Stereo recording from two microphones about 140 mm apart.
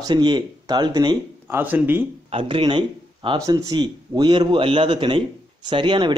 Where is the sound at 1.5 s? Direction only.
15° right (ahead or behind).